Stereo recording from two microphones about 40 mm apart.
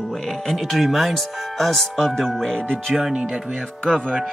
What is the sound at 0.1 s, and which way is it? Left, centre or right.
Speech, centre.